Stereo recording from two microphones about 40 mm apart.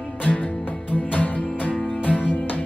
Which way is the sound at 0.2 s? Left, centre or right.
Left.